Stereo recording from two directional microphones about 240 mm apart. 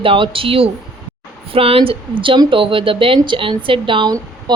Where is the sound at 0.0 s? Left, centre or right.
Right.